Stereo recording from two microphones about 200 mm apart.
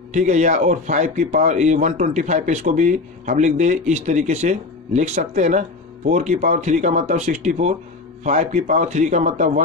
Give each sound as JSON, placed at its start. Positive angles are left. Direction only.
{"t": 0.1, "sound": "speech", "side_deg": -35}